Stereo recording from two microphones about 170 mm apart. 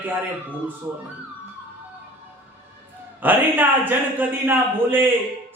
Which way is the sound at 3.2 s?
10° right (ahead or behind).